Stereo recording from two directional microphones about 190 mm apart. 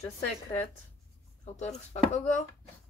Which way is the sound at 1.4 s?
35° left (ahead or behind).